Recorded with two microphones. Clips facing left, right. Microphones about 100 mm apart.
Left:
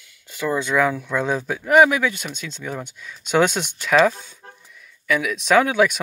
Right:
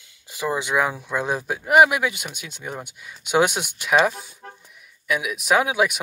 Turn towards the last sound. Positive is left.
turn(degrees=-10)  # may be behind; listen again after turning